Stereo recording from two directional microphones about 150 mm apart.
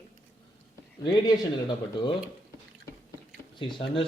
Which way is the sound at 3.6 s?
35° left (ahead or behind).